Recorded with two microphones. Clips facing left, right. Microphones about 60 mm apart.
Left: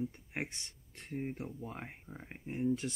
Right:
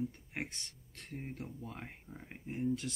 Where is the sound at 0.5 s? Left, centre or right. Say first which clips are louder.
Even; left.